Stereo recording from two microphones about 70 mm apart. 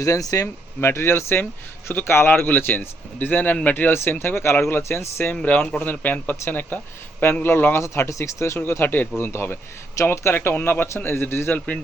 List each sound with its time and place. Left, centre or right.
0.0 s speech: left
0.8 s a man's voice: left
5.3 s a man's voice: left